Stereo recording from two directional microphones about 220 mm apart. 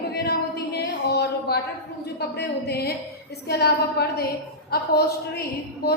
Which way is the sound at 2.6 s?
45° left (ahead or behind).